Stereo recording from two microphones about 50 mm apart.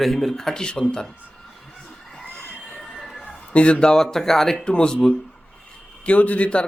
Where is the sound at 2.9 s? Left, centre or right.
Centre.